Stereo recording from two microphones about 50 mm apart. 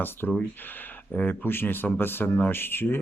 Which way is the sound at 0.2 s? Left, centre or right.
Left.